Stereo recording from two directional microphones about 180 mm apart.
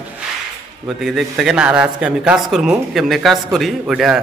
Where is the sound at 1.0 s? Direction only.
Centre (ahead or behind).